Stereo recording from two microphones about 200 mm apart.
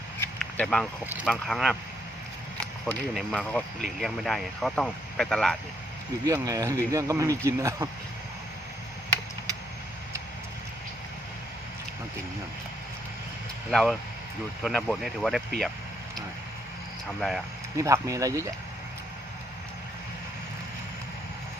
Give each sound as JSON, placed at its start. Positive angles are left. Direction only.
{"t": 0.5, "sound": "speech", "side_deg": 5}
{"t": 2.8, "sound": "speech", "side_deg": 0}
{"t": 6.2, "sound": "speech", "side_deg": -15}
{"t": 13.7, "sound": "speech", "side_deg": 0}
{"t": 17.2, "sound": "speech", "side_deg": 0}
{"t": 17.7, "sound": "speech", "side_deg": -15}